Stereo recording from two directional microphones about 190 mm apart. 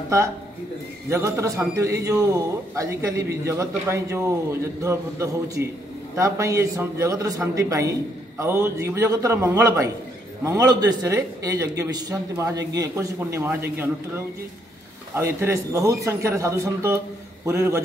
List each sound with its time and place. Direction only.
1.1 s a man's voice: 15° right (ahead or behind)